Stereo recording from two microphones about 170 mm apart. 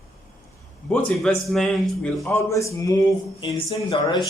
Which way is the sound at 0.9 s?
5° left (ahead or behind).